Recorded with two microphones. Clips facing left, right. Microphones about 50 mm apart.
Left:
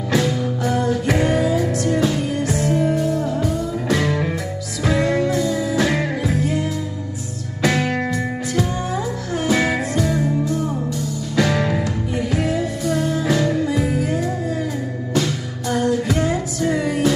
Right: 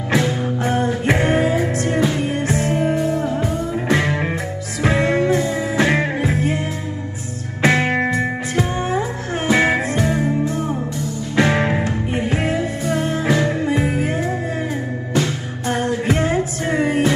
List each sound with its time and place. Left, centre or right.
0.1 s music: right